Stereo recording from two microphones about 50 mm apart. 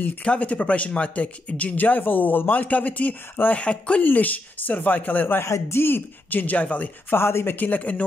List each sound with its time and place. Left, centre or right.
0.2 s speech: left
3.6 s speech: left
4.0 s speech: left
5.4 s speech: left
6.4 s speech: left
7.1 s speech: left
7.5 s speech: left